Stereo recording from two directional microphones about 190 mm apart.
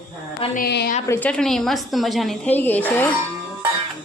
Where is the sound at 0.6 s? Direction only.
55° left (ahead or behind).